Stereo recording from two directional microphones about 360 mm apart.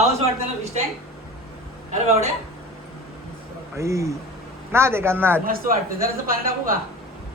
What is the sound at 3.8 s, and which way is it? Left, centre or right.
A man's voice, centre.